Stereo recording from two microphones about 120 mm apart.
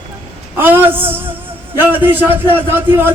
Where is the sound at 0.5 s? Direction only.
15° right (ahead or behind).